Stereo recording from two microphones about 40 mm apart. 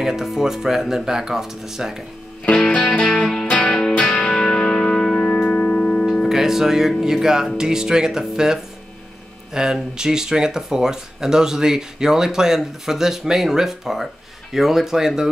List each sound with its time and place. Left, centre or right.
0.0 s speech: centre
2.7 s music: left
4.4 s music: centre
5.6 s music: left
6.2 s speech: centre